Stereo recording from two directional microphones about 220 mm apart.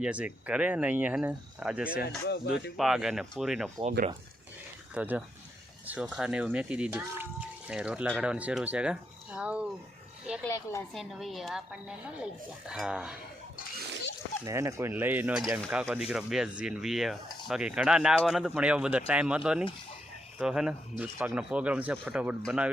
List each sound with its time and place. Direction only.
0.0 s speech: 5° right (ahead or behind)
2.2 s speech: 50° left (ahead or behind)
2.7 s speech: centre (ahead or behind)
4.9 s speech: 5° right (ahead or behind)
10.4 s a woman's voice: 15° left (ahead or behind)
10.9 s speech: centre (ahead or behind)
14.4 s speech: 15° right (ahead or behind)